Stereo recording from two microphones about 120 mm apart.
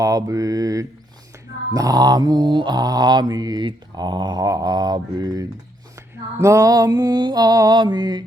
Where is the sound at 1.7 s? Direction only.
30° right (ahead or behind).